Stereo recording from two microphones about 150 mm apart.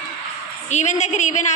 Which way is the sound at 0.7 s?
50° left (ahead or behind).